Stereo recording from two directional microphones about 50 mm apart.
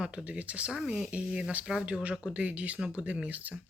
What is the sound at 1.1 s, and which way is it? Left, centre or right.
Speech, right.